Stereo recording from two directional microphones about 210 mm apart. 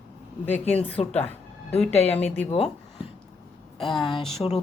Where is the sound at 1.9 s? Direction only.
30° left (ahead or behind).